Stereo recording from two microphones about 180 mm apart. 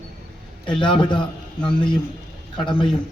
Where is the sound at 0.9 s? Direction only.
25° left (ahead or behind).